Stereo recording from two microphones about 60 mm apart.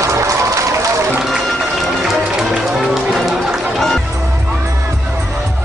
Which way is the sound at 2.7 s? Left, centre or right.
Centre.